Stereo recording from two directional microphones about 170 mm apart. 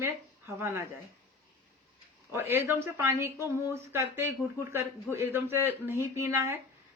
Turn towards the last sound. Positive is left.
turn(degrees=-15)  # may be behind; listen again after turning